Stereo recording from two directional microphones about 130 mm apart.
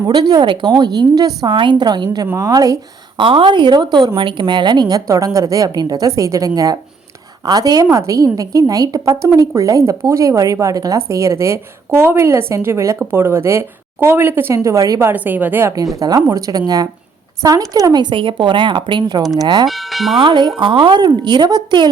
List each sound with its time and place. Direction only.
0.1 s a woman's voice: 35° right (ahead or behind)
2.2 s speech: 25° right (ahead or behind)
3.2 s a woman's voice: 40° right (ahead or behind); by 15.1 s 25° right (ahead or behind)
15.1 s a woman's voice: 15° right (ahead or behind)
16.0 s a woman's voice: 30° right (ahead or behind)
19.6 s tubular bells: centre (ahead or behind)
20.1 s a woman's voice: 35° right (ahead or behind)